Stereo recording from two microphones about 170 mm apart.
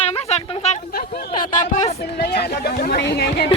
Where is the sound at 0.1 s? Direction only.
40° left (ahead or behind).